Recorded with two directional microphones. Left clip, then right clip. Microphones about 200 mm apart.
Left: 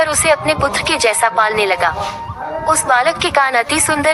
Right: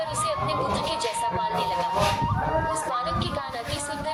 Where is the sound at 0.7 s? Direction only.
45° left (ahead or behind).